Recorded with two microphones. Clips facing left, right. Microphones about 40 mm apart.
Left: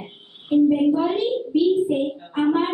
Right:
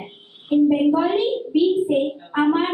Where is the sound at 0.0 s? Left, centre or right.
Centre.